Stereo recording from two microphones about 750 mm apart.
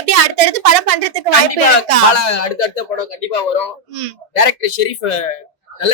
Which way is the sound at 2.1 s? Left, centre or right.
Left.